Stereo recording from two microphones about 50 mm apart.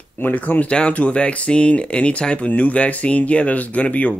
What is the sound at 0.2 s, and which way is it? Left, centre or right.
Speech, left.